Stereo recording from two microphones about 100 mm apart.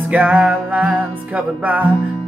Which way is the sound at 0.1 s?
15° right (ahead or behind).